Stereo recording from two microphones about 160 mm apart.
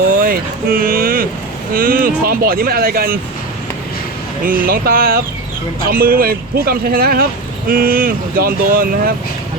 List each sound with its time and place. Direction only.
0.1 s vehicle: 65° right (ahead or behind)
1.7 s speech: 65° right (ahead or behind)
4.4 s speech: 65° right (ahead or behind)